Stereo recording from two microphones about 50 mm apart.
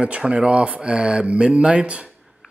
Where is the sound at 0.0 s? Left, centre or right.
Right.